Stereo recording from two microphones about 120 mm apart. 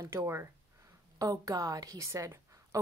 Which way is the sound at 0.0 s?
25° right (ahead or behind).